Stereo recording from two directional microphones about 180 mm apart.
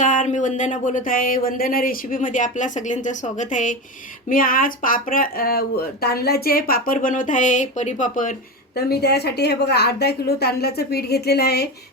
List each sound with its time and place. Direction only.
0.0 s speech: 45° left (ahead or behind); by 11.7 s 60° left (ahead or behind)